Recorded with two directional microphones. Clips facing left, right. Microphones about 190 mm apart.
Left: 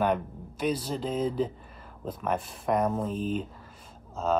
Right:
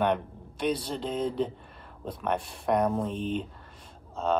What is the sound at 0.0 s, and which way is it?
Speech, 5° left (ahead or behind).